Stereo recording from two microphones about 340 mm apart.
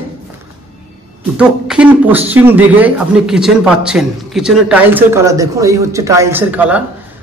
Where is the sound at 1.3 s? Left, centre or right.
Centre.